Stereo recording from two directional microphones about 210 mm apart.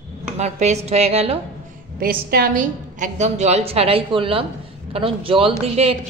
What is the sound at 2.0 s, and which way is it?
A woman's voice, 45° right (ahead or behind).